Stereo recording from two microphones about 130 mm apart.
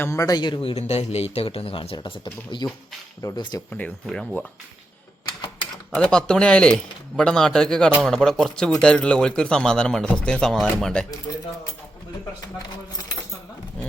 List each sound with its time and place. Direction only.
0.0 s a man's voice: 25° left (ahead or behind)
3.7 s speech: 10° left (ahead or behind)
6.0 s speech: 5° left (ahead or behind)
11.3 s speech: 30° left (ahead or behind)